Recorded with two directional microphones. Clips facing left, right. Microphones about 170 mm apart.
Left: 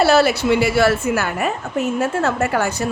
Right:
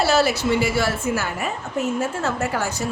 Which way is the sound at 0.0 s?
60° left (ahead or behind).